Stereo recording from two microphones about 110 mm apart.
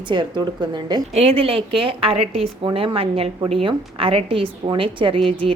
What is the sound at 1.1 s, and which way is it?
A woman's voice, 65° right (ahead or behind).